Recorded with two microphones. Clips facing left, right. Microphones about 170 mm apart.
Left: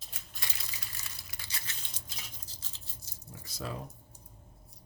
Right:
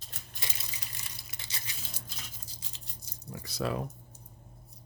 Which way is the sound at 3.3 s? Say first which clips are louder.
Right 7 dB; 70° right (ahead or behind).